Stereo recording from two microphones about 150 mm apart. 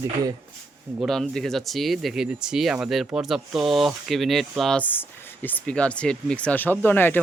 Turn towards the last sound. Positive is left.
turn(degrees=10)  # may be behind; listen again after turning